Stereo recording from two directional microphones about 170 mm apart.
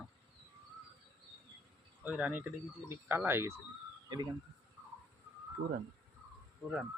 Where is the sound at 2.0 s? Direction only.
10° right (ahead or behind).